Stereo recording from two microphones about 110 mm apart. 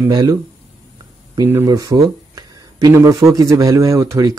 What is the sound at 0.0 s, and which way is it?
Speech, 35° right (ahead or behind).